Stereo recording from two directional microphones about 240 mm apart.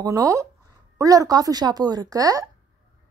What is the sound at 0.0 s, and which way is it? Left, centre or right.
A woman's voice, centre.